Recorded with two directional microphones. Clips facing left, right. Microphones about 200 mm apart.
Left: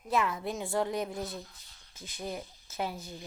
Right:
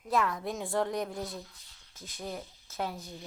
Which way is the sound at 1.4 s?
45° left (ahead or behind).